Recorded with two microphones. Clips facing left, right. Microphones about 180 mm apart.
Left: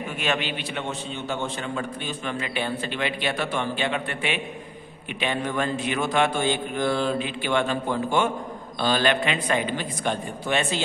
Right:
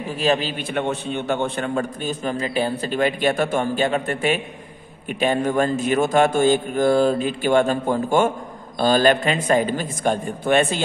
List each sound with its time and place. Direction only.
0.2 s a man's voice: 35° right (ahead or behind)
0.7 s a man's voice: 55° right (ahead or behind)